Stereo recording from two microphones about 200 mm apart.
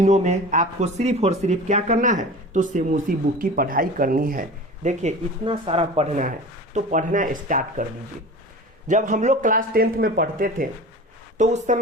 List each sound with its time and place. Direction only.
0.0 s speech: 35° right (ahead or behind)
8.9 s speech: 40° right (ahead or behind)